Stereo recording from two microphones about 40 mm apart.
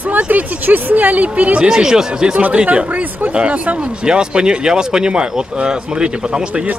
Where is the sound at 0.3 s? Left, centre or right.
Right.